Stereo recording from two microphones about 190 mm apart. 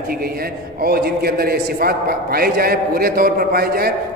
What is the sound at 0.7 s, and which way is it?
A man's voice, 55° right (ahead or behind).